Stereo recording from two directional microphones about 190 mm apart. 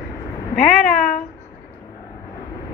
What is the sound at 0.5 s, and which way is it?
Speech, 45° left (ahead or behind).